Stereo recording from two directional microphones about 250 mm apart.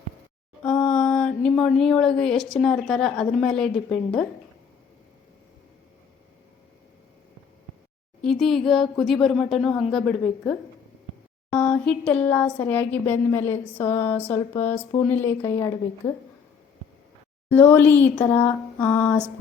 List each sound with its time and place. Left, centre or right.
0.6 s speech: centre
8.2 s a woman's voice: centre
16.0 s speech: left
17.5 s a woman's voice: centre